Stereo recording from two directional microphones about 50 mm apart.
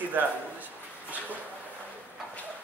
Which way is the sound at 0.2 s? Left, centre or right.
Right.